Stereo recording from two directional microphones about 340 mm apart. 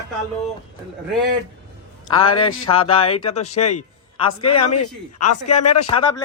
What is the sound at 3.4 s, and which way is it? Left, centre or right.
Speech, left.